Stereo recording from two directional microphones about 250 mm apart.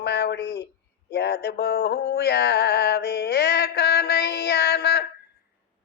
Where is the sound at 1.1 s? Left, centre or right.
Left.